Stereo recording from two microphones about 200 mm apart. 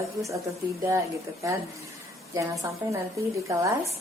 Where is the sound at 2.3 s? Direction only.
15° right (ahead or behind).